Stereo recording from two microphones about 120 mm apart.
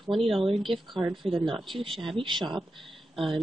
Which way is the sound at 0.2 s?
50° right (ahead or behind).